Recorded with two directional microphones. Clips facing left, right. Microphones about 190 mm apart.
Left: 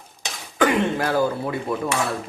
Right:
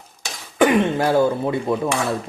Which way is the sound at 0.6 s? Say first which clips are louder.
Right 4 dB; 25° right (ahead or behind).